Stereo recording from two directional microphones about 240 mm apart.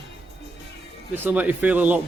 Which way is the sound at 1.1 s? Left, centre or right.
Centre.